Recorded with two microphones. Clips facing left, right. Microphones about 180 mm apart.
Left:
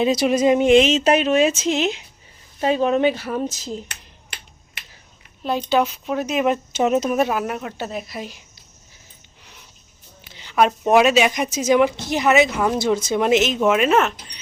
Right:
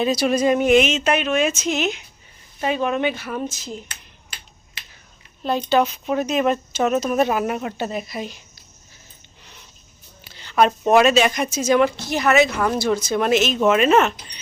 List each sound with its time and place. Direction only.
0.0 s a woman's voice: 20° left (ahead or behind)
5.4 s speech: 5° left (ahead or behind)
7.2 s speech: centre (ahead or behind)
10.2 s a woman's voice: 15° left (ahead or behind)
13.6 s speech: 5° left (ahead or behind)